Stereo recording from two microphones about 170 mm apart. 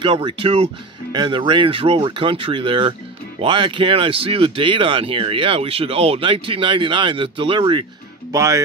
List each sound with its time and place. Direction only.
0.0 s speech: 30° right (ahead or behind)
8.3 s speech: 20° right (ahead or behind)